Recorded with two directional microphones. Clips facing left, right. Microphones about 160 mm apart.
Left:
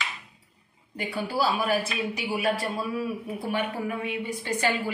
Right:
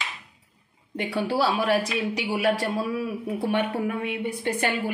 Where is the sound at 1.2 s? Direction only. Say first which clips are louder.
Right 3 dB; 75° right (ahead or behind).